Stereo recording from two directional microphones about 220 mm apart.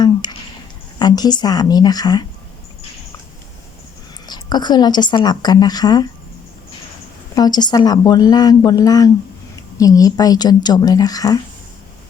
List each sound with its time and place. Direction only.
0.0 s a sound: 20° left (ahead or behind)
0.9 s speech: 20° left (ahead or behind)
4.3 s speech: 20° left (ahead or behind)
7.3 s speech: 20° left (ahead or behind)